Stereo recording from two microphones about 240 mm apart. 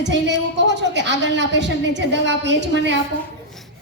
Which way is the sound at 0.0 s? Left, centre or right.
Right.